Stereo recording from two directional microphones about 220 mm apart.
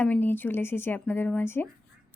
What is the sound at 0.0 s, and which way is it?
Speech, 10° left (ahead or behind).